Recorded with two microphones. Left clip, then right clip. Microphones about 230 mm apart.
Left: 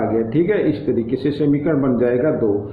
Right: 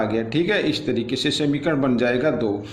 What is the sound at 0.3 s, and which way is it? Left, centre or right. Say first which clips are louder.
Speech: left 2 dB; right.